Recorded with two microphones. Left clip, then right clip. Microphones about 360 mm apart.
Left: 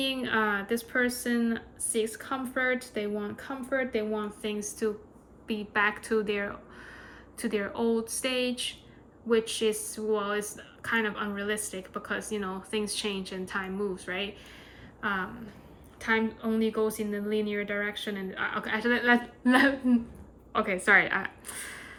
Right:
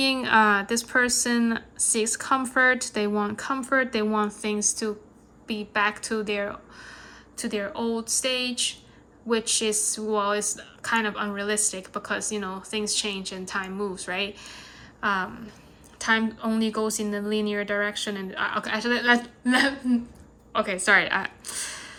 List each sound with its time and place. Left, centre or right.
0.0 s a woman's voice: centre